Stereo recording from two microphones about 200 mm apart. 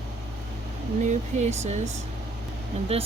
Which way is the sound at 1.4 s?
35° right (ahead or behind).